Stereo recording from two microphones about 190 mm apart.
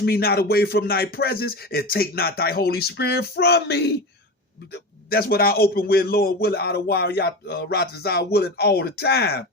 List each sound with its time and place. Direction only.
0.0 s a man's voice: 55° left (ahead or behind)